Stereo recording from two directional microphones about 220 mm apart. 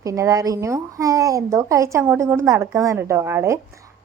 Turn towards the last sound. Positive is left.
turn(degrees=-10)  # may be behind; listen again after turning